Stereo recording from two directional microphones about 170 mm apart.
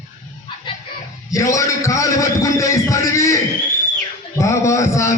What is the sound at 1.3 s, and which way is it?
A man's voice, 20° left (ahead or behind).